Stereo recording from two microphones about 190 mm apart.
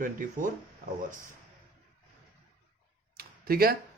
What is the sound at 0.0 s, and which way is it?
Speech, 45° right (ahead or behind).